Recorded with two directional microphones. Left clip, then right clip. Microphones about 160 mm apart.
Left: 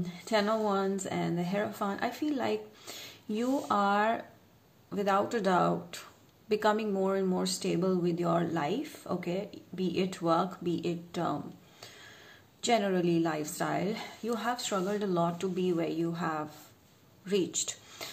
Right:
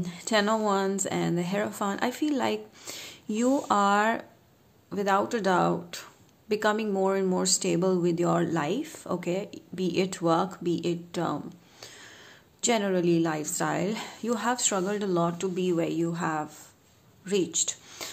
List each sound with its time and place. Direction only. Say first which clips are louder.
0.0 s speech: right 4 dB; 40° right (ahead or behind)
4.8 s speech: right 3 dB; 30° right (ahead or behind)
11.8 s a sound: right 4 dB; 30° right (ahead or behind)
12.6 s speech: right 3 dB; 30° right (ahead or behind)